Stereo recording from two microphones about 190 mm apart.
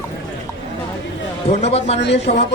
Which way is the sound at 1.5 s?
35° left (ahead or behind).